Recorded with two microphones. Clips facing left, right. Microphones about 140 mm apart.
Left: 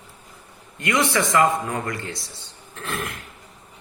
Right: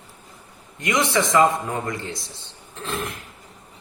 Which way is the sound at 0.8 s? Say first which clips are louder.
Even; 20° right (ahead or behind).